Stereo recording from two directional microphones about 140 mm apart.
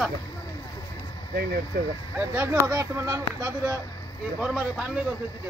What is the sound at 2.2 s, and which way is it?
Speech, 15° right (ahead or behind).